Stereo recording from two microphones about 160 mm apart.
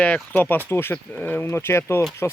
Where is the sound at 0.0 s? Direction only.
10° left (ahead or behind).